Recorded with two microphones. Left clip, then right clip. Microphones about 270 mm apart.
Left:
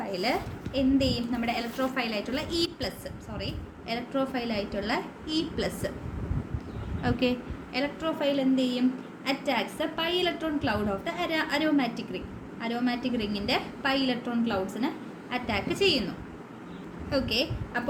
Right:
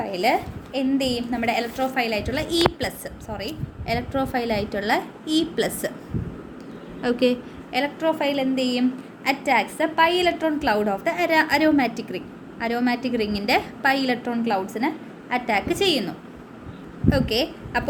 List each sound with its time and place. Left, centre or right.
0.0 s a woman's voice: right
7.0 s a woman's voice: centre
17.1 s a woman's voice: centre